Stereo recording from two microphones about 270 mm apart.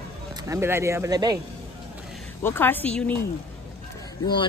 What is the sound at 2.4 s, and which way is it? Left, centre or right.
Speech, centre.